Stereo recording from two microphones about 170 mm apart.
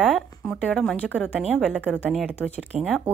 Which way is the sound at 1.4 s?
Centre (ahead or behind).